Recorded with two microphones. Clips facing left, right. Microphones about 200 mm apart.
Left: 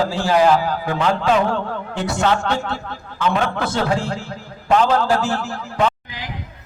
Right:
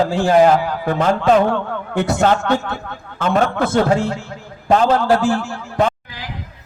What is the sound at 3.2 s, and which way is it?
A man's voice, 45° right (ahead or behind).